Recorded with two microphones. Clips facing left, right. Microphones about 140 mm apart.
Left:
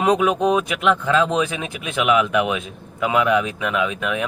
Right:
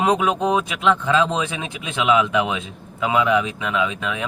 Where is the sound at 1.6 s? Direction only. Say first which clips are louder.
Left 1 dB; 25° right (ahead or behind).